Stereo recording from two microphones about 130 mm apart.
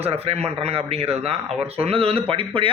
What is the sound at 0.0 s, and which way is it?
A man's voice, 50° right (ahead or behind).